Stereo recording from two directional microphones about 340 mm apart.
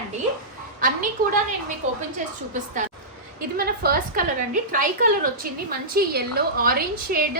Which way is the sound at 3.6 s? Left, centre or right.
Right.